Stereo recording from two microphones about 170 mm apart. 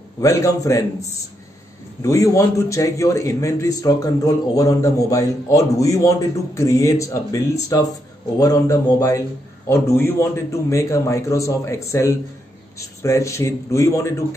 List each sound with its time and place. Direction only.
0.2 s a man's voice: 20° left (ahead or behind)
2.0 s a man's voice: 20° left (ahead or behind)